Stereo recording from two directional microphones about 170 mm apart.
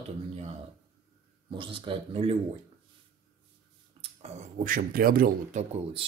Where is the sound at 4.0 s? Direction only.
35° right (ahead or behind).